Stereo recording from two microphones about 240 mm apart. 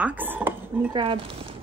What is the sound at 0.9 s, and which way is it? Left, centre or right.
Speech, right.